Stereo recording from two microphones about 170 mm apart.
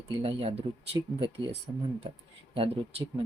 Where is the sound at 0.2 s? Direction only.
35° right (ahead or behind).